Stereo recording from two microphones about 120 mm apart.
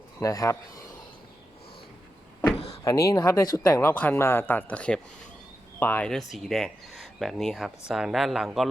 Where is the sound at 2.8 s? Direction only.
25° left (ahead or behind).